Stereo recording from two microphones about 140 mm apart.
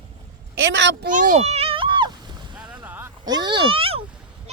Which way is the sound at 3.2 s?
30° right (ahead or behind).